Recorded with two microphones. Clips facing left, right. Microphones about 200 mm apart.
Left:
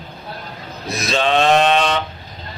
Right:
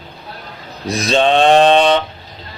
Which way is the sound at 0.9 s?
35° right (ahead or behind).